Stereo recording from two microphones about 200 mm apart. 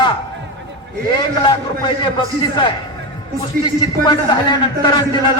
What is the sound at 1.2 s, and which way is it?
Speech, 20° left (ahead or behind).